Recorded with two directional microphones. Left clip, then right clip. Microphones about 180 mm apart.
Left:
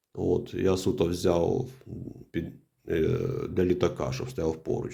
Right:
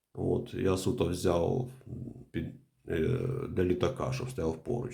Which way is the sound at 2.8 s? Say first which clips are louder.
Left 5 dB; 25° left (ahead or behind).